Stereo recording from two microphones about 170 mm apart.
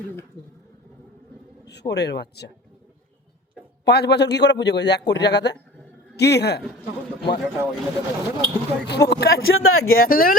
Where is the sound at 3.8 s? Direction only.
80° left.